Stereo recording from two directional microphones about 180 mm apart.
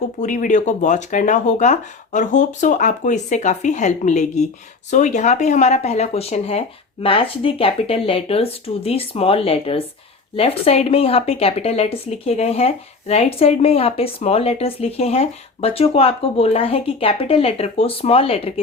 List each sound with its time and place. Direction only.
0.2 s speech: 45° left (ahead or behind)